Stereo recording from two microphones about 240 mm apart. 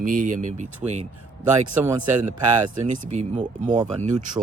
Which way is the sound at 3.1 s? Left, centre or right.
Right.